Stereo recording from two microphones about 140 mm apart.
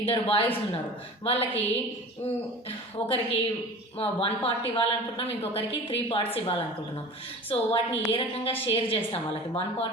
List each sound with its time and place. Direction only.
0.0 s a woman's voice: 45° left (ahead or behind)
2.6 s a woman's voice: 45° left (ahead or behind)